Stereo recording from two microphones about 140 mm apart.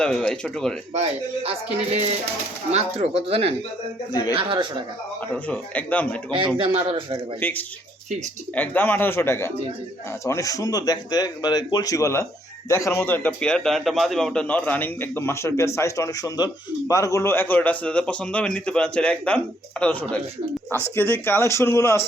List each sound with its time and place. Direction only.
0.0 s speech: 5° left (ahead or behind)
0.9 s speech: 45° right (ahead or behind)
4.1 s speech: 30° left (ahead or behind)
4.4 s a man's voice: 35° right (ahead or behind)
5.3 s a man's voice: 10° left (ahead or behind)
6.6 s a man's voice: 40° right (ahead or behind)
7.3 s a man's voice: 15° left (ahead or behind)